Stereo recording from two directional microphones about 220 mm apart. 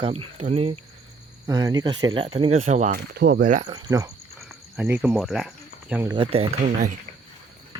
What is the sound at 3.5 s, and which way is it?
Speech, 30° right (ahead or behind).